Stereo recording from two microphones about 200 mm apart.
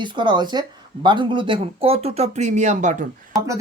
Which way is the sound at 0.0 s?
25° right (ahead or behind).